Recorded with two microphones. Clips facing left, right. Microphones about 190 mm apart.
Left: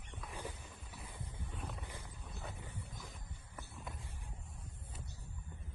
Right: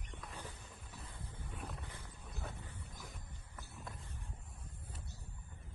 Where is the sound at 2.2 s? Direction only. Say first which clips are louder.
Right 1 dB; centre (ahead or behind).